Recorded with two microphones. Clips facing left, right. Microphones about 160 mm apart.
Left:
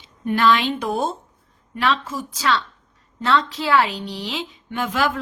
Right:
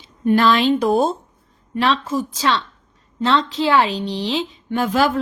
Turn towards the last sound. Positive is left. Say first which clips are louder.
# right 5 dB
turn(degrees=-35)  # may be behind; listen again after turning